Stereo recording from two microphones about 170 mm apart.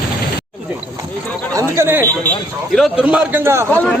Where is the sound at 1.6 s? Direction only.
15° right (ahead or behind).